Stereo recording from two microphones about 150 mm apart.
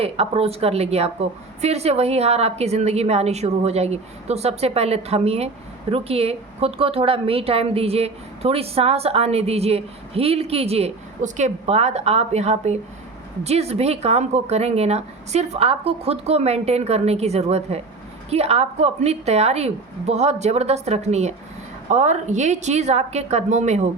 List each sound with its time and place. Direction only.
0.0 s a woman's voice: 40° right (ahead or behind)